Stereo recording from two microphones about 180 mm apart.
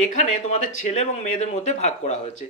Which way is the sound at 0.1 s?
40° left (ahead or behind).